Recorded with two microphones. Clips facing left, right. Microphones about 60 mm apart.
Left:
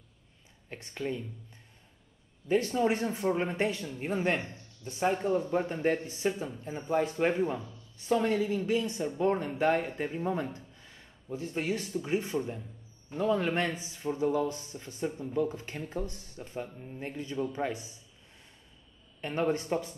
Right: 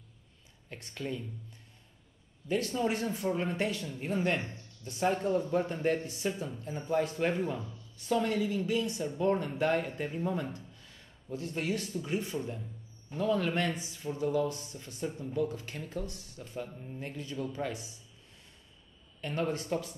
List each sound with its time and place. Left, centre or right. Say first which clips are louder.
0.7 s speech: left 3 dB; left
2.4 s speech: left 4 dB; left
13.1 s speech: left 2 dB; centre
15.4 s speech: left 1 dB; left
16.6 s speech: even; centre
17.0 s speech: left 4 dB; left
19.2 s speech: left 3 dB; left